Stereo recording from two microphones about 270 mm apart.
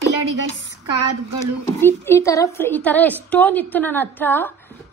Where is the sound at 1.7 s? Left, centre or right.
Centre.